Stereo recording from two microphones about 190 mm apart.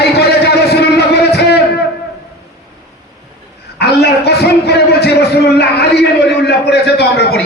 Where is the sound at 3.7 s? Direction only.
60° left (ahead or behind).